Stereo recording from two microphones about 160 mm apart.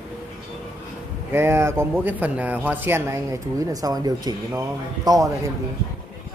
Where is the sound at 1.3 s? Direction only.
15° right (ahead or behind).